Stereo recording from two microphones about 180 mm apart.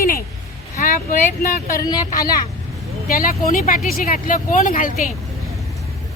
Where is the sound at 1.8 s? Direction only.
20° left (ahead or behind).